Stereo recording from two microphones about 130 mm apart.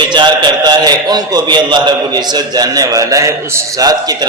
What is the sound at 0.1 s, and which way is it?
A man's voice, 35° right (ahead or behind).